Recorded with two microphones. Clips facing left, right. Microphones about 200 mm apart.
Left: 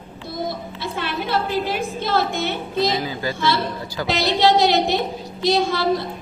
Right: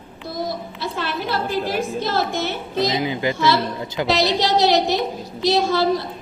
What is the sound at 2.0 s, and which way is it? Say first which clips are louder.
Speech: left 1 dB; 55° left (ahead or behind).